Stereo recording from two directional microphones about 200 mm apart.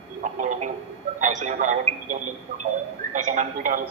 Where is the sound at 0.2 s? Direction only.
40° right (ahead or behind).